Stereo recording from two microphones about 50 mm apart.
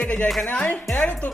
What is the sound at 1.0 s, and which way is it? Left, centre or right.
Speech, left.